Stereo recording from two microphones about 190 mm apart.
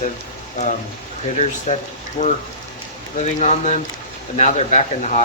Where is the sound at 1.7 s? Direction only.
30° left (ahead or behind).